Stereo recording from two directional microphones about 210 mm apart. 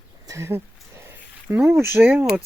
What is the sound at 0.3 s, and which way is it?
Speech, 10° right (ahead or behind).